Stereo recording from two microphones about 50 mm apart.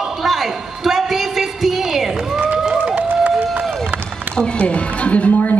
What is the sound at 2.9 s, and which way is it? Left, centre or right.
Music, right.